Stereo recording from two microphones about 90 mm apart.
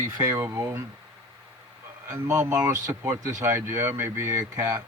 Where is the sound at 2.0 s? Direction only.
30° right (ahead or behind).